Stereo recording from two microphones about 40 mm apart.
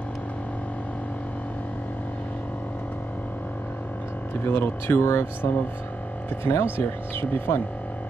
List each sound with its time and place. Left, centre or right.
4.5 s speech: left
6.4 s speech: left